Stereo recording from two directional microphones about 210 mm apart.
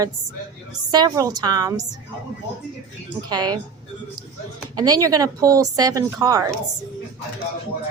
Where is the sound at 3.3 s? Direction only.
20° right (ahead or behind).